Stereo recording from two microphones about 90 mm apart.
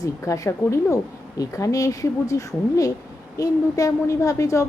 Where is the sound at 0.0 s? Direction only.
40° left (ahead or behind).